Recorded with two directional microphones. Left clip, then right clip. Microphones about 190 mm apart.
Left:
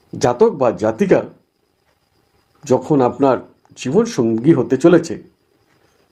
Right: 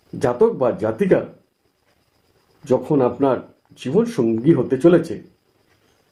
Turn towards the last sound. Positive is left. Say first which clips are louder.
# left 3 dB
turn(degrees=35)  # may be behind; listen again after turning